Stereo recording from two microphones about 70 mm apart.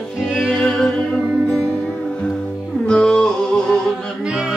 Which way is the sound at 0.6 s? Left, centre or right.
Centre.